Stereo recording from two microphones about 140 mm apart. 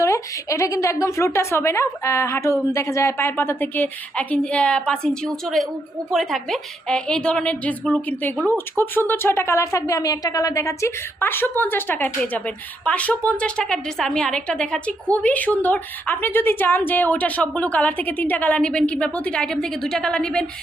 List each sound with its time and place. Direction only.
0.0 s a woman's voice: 20° left (ahead or behind); by 20.4 s 5° left (ahead or behind)